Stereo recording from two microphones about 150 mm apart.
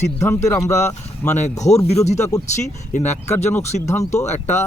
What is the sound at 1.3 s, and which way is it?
Speech, 50° left (ahead or behind).